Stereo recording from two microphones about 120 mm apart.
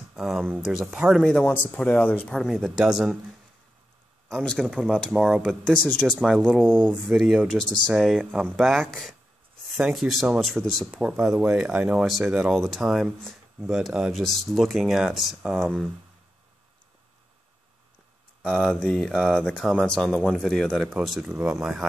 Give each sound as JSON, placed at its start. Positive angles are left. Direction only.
{"t": 0.1, "sound": "speech", "side_deg": 0}
{"t": 1.2, "sound": "speech", "side_deg": 10}
{"t": 4.5, "sound": "speech", "side_deg": 0}
{"t": 18.4, "sound": "speech", "side_deg": 5}